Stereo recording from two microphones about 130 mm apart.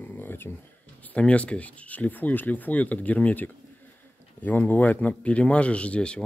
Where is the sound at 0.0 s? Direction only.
15° left (ahead or behind).